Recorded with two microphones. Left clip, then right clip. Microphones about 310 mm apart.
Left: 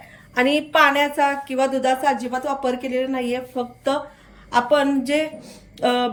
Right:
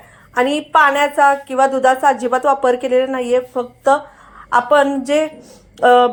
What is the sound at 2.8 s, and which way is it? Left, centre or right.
Speech, right.